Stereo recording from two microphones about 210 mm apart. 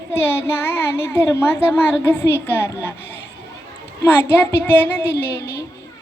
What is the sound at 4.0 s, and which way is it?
Child singing, 10° left (ahead or behind).